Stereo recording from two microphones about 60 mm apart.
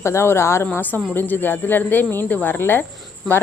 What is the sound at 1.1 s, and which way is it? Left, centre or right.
Speech, left.